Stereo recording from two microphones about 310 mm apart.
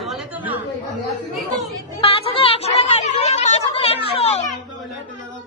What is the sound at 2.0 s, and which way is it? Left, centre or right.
Chatter, centre.